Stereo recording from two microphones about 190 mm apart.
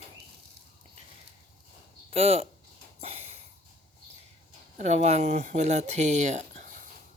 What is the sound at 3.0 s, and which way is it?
Sniff, 35° right (ahead or behind).